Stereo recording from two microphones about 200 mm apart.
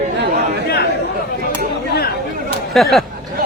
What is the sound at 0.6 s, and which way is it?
Chatter, 50° left (ahead or behind).